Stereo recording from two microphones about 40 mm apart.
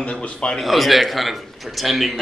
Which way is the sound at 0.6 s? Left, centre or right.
Centre.